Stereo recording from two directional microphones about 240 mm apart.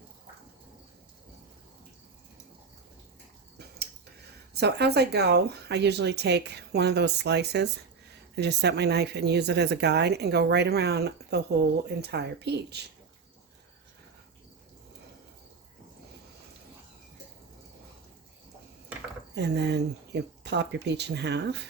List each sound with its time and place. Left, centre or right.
4.5 s speech: right
19.3 s speech: right